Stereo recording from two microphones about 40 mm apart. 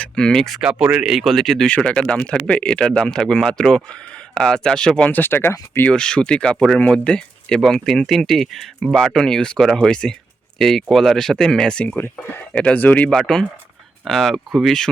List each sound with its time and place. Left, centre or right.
0.0 s a sound: centre
0.6 s speech: centre
1.1 s speech: centre
1.7 s speech: left
5.1 s speech: left
5.9 s speech: left
7.7 s speech: centre
12.5 s speech: left
12.8 s speech: left
13.1 s speech: centre